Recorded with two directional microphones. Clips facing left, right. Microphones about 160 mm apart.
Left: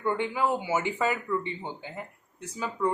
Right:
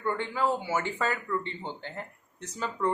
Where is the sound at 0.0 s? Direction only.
15° left (ahead or behind).